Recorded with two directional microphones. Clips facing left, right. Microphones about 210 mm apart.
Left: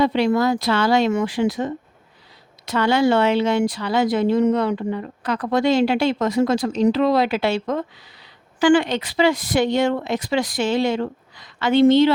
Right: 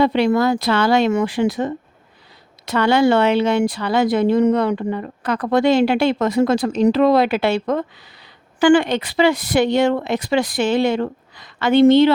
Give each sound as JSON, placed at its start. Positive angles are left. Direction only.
{"t": 0.0, "sound": "speech", "side_deg": -60}